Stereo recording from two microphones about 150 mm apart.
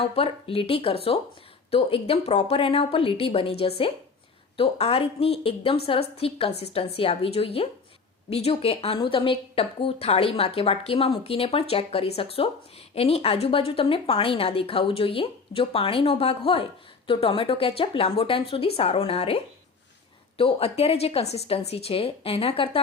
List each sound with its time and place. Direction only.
0.0 s a woman's voice: 40° left (ahead or behind)